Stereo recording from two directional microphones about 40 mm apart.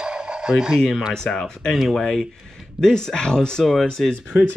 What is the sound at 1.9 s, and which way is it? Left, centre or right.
Speech, centre.